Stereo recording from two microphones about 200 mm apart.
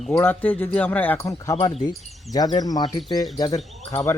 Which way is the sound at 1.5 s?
35° left (ahead or behind).